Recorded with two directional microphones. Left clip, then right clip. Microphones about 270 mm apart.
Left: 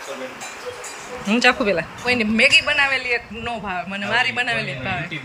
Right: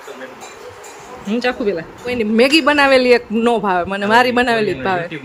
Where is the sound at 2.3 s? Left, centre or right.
Right.